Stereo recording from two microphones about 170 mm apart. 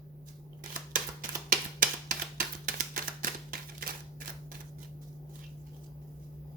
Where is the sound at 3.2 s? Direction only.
55° right (ahead or behind).